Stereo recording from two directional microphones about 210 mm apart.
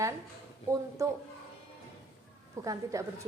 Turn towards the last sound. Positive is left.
turn(degrees=-15)  # may be behind; listen again after turning